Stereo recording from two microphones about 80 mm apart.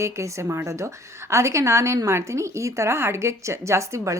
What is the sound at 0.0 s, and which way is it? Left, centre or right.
A woman's voice, right.